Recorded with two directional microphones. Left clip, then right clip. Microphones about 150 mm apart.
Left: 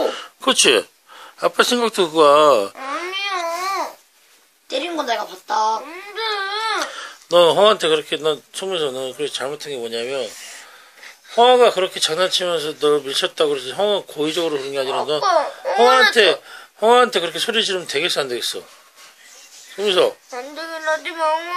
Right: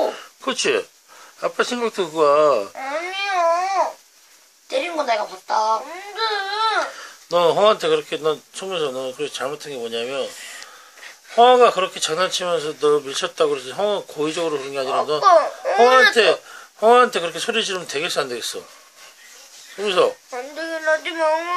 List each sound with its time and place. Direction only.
0.0 s a sound: 50° left (ahead or behind)
1.4 s speech: 45° left (ahead or behind)
2.9 s babbling: 10° right (ahead or behind)
4.6 s speech: 15° left (ahead or behind)
6.8 s speech: 40° left (ahead or behind); by 10.3 s 20° left (ahead or behind)
11.3 s speech: 20° left (ahead or behind)
15.2 s speech: centre (ahead or behind)
16.1 s speech: 25° left (ahead or behind)
19.8 s speech: 25° left (ahead or behind)
20.2 s speech: 5° right (ahead or behind)